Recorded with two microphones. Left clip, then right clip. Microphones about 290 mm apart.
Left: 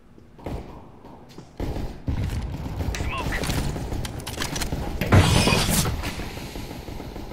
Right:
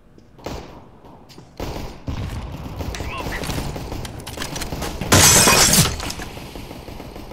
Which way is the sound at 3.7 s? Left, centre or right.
Centre.